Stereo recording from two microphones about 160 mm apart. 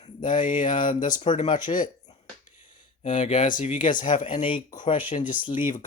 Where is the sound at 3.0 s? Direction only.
50° left (ahead or behind).